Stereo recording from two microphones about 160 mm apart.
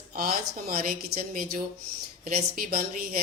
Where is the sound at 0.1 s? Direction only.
65° right (ahead or behind).